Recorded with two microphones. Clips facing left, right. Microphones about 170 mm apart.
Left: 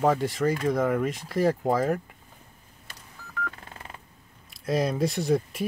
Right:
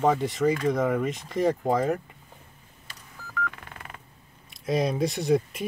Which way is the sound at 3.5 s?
30° left (ahead or behind).